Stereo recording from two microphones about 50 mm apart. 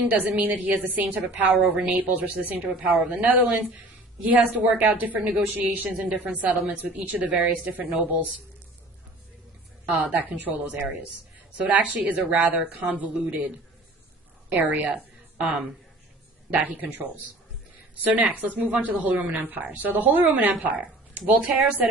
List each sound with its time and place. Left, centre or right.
0.2 s a woman's voice: right
10.2 s a woman's voice: right
14.5 s a woman's voice: right